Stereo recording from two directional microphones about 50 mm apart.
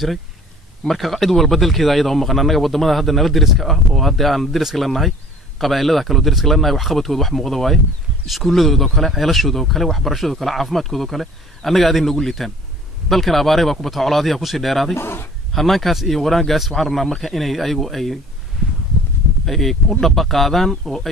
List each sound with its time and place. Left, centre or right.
0.8 s speech: centre
15.0 s a sound: left
15.5 s speech: centre
19.4 s speech: centre